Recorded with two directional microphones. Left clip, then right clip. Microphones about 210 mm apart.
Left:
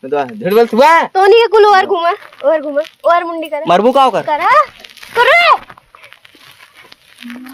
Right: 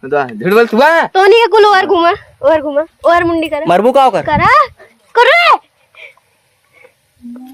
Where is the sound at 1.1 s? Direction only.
55° right (ahead or behind).